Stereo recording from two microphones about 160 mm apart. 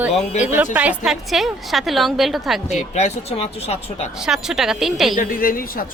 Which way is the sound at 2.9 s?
45° left (ahead or behind).